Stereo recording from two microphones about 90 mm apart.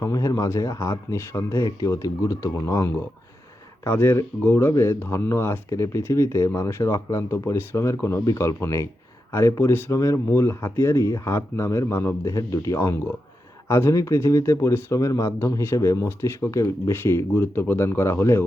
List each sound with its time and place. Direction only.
0.0 s speech: 40° left (ahead or behind)